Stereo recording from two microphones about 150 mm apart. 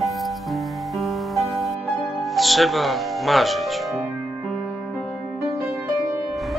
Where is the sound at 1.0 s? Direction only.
Centre (ahead or behind).